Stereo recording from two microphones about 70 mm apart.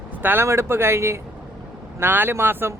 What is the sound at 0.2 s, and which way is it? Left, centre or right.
Speech, right.